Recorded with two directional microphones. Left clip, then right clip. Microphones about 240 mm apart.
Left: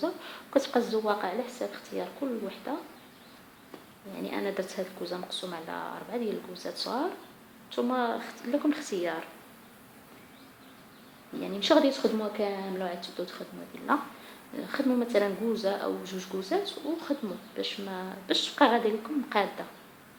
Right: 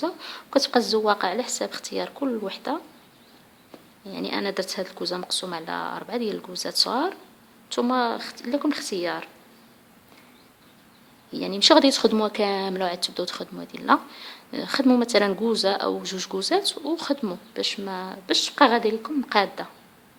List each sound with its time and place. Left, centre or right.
0.0 s speech: right
0.9 s speech: right
4.1 s speech: right
11.3 s speech: right